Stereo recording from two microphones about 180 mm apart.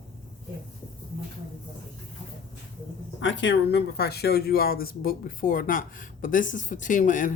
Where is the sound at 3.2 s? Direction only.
90° left; by 7.3 s 45° left (ahead or behind).